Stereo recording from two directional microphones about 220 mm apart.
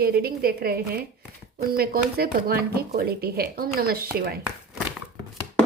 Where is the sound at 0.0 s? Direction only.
45° right (ahead or behind).